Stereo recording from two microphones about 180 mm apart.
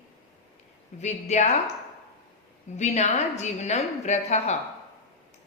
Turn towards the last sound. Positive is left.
turn(degrees=40)  # may be behind; listen again after turning